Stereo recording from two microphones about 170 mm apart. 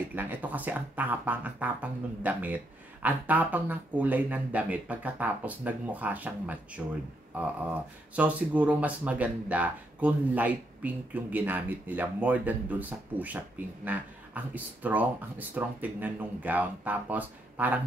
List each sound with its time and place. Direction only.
0.1 s speech: 10° right (ahead or behind)
8.2 s speech: 10° right (ahead or behind)